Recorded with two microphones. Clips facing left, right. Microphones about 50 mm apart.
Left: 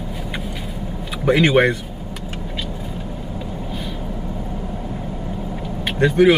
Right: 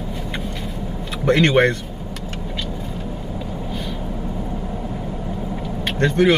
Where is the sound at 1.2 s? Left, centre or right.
Centre.